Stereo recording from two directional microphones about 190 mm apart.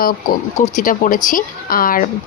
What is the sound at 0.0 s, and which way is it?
Speech, 50° left (ahead or behind).